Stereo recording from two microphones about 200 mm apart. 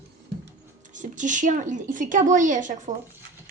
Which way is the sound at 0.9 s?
40° right (ahead or behind).